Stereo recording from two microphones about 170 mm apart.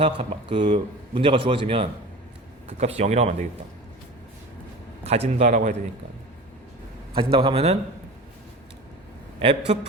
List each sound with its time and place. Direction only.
0.0 s speech: 30° right (ahead or behind)
5.0 s a man's voice: 40° right (ahead or behind)
7.1 s speech: 30° right (ahead or behind)
9.4 s speech: 35° right (ahead or behind)